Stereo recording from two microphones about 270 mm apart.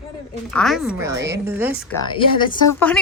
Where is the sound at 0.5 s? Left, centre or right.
Centre.